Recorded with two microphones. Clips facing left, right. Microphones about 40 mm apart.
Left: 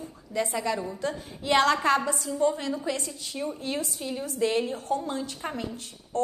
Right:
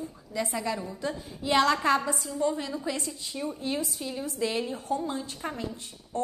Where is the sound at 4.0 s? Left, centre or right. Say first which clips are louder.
Left 1 dB; left.